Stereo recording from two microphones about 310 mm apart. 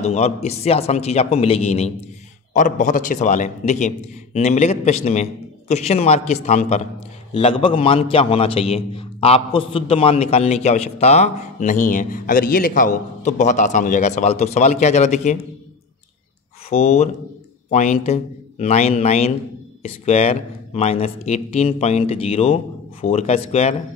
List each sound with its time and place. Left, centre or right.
0.0 s a man's voice: left
16.6 s a man's voice: left